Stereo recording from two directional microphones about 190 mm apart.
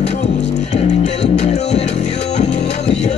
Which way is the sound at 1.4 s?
35° left (ahead or behind).